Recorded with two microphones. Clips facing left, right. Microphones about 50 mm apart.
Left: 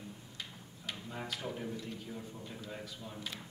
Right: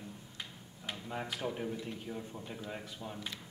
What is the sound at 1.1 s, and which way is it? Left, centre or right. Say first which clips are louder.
A man's voice: right 4 dB; centre.